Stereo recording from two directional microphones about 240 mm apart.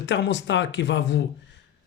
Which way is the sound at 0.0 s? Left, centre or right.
Left.